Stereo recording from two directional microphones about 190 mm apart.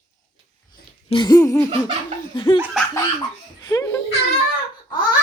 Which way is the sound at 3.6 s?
20° left (ahead or behind).